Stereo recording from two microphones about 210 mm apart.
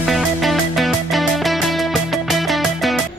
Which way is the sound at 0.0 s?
Centre (ahead or behind).